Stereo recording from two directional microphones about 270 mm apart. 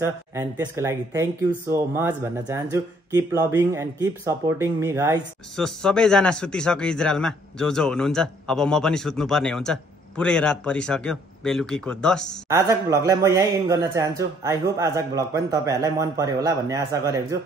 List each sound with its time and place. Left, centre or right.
0.0 s speech: centre
5.6 s speech: centre
12.4 s speech: centre